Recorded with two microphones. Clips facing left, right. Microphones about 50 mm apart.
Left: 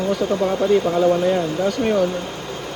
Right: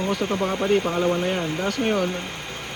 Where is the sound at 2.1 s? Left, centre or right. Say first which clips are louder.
Left 4 dB; right.